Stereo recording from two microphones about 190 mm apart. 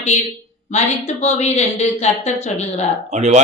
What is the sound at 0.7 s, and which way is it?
Speech, 35° left (ahead or behind).